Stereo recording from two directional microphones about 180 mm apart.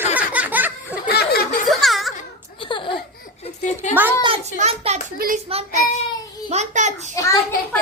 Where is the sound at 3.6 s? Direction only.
40° left (ahead or behind).